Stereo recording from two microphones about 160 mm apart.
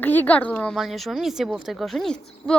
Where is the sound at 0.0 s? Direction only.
10° left (ahead or behind).